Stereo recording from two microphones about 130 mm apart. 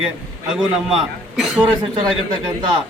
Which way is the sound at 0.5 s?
5° right (ahead or behind).